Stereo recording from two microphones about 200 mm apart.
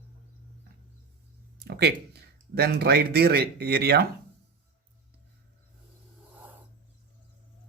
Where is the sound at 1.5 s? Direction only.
55° right (ahead or behind).